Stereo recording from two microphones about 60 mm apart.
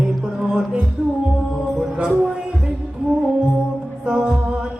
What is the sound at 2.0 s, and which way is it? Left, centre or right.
Music, centre.